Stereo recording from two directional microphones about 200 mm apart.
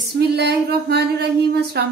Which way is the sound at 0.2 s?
55° right (ahead or behind).